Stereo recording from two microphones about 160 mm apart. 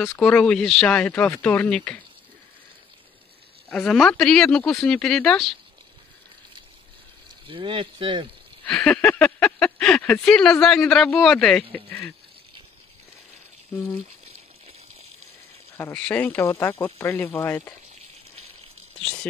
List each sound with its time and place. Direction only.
0.2 s speech: 5° left (ahead or behind)
3.7 s speech: 5° left (ahead or behind)
7.4 s speech: 35° right (ahead or behind)
8.6 s speech: 5° left (ahead or behind)
15.8 s speech: 10° left (ahead or behind)